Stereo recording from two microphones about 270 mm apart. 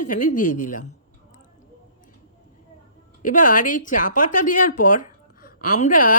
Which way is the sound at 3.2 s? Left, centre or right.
Left.